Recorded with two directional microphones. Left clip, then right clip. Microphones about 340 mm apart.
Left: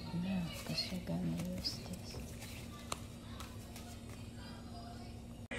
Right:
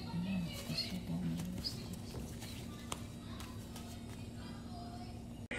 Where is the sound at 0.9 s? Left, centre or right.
Centre.